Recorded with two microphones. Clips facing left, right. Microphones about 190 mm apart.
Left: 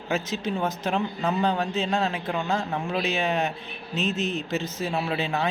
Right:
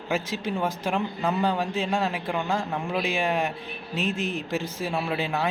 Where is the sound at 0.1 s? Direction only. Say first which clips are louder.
Left 1 dB; 10° right (ahead or behind).